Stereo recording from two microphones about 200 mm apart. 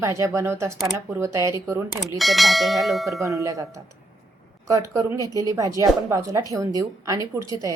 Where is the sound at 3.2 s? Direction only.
15° right (ahead or behind).